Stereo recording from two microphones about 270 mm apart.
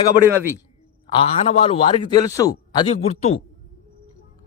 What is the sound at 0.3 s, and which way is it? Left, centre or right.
Speech, centre.